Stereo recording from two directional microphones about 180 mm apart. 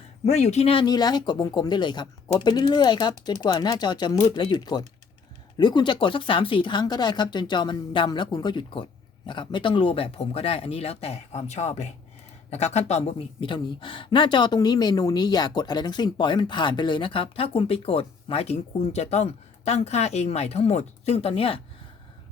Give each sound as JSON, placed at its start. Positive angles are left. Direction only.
{"t": 0.3, "sound": "speech", "side_deg": 40}